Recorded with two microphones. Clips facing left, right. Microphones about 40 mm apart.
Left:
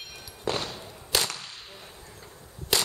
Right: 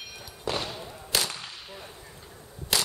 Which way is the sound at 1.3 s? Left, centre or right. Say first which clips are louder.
Right 1 dB; centre.